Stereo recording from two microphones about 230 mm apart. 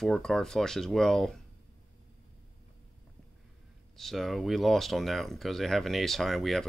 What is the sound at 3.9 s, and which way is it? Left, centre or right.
Speech, centre.